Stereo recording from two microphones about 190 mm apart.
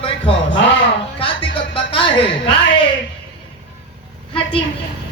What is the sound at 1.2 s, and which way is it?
A man's voice, 25° left (ahead or behind).